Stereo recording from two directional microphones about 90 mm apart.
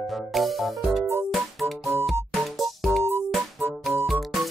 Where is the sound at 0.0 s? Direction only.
Centre (ahead or behind).